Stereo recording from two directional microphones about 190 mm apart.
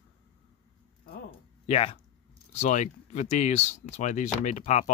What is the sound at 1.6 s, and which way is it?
Speech, 30° left (ahead or behind).